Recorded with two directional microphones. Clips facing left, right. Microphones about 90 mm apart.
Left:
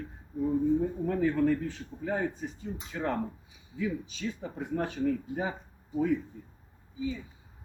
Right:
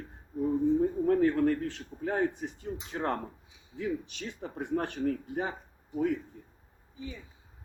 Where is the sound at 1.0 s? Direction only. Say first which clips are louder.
Right 2 dB; 60° right (ahead or behind).